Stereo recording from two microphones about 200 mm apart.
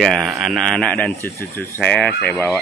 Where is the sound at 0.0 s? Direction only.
Centre (ahead or behind).